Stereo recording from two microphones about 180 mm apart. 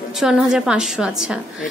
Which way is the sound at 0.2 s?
5° right (ahead or behind).